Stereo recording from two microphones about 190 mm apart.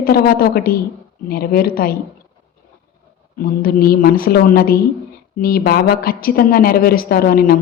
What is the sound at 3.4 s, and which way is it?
Speech, 50° left (ahead or behind).